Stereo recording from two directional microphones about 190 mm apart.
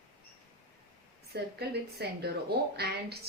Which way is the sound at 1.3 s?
60° right (ahead or behind).